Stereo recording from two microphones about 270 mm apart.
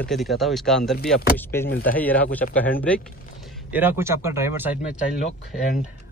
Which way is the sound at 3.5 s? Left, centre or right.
Centre.